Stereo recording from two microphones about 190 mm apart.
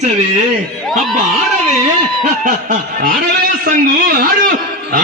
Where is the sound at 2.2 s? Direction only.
45° right (ahead or behind).